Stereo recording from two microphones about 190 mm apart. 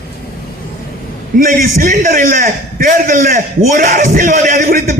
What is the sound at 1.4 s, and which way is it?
A man's voice, 50° right (ahead or behind).